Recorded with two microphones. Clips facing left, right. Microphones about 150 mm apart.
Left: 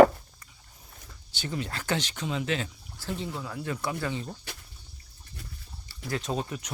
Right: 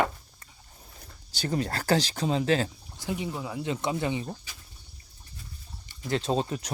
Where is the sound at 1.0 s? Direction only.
40° right (ahead or behind).